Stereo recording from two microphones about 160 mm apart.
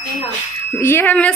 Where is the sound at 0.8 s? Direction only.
15° left (ahead or behind).